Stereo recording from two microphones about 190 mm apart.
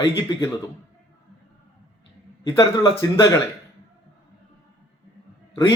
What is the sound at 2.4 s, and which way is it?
Speech, 20° left (ahead or behind).